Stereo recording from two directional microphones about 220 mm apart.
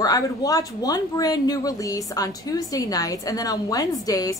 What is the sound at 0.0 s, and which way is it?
Speech, 15° left (ahead or behind).